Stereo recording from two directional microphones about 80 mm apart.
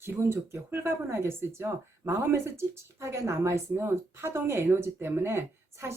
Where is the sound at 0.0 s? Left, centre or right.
Right.